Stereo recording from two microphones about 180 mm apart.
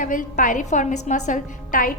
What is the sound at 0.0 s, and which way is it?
A woman's voice, 50° left (ahead or behind).